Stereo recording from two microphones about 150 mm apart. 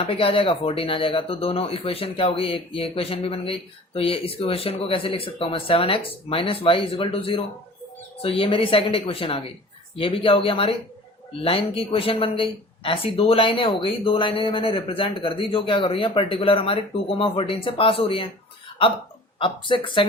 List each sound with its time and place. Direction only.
0.0 s speech: 40° left (ahead or behind)
19.4 s speech: 35° left (ahead or behind)